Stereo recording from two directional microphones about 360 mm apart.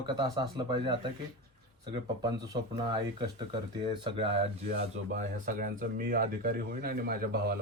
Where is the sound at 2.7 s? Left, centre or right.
Centre.